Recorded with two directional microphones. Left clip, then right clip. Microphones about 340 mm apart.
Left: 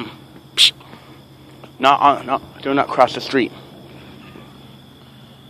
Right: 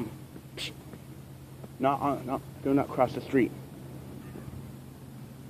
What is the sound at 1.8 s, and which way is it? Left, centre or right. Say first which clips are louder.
Speech: left 15 dB; centre.